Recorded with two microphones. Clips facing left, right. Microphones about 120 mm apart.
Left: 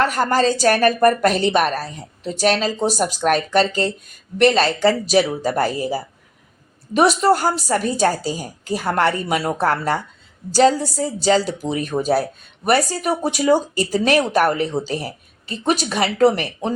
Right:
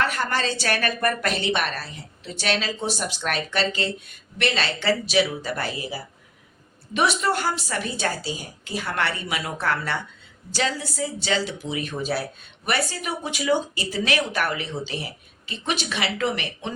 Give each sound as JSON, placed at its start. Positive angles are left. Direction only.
{"t": 0.0, "sound": "speech", "side_deg": 40}